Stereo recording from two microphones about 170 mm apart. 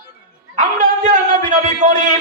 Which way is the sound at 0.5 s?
45° right (ahead or behind).